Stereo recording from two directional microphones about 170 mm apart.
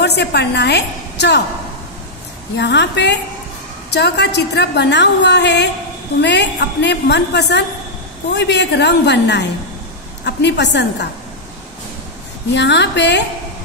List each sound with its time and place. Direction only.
0.0 s a woman's voice: 80° left
2.5 s a woman's voice: 90° left
12.5 s a woman's voice: 90° left